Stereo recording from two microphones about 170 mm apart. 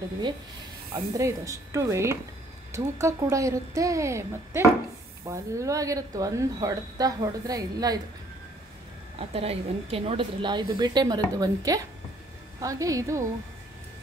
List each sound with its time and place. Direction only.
1.1 s speech: 20° right (ahead or behind)
9.3 s speech: 35° right (ahead or behind); by 13.2 s 20° right (ahead or behind)